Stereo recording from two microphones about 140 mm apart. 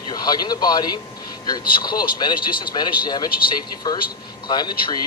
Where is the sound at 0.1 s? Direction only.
30° left (ahead or behind).